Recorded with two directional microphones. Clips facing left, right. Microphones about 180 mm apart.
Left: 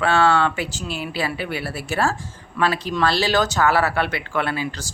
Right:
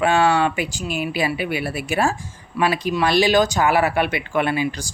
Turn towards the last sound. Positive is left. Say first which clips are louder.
# right 4 dB
turn(degrees=-15)  # may be behind; listen again after turning